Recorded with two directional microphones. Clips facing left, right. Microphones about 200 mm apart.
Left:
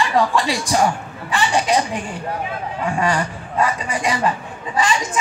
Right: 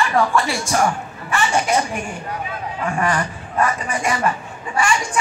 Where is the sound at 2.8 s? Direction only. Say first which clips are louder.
Left 1 dB; 15° left (ahead or behind).